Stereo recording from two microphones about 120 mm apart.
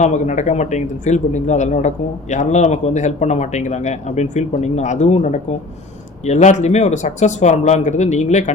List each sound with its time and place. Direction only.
0.0 s speech: 80° left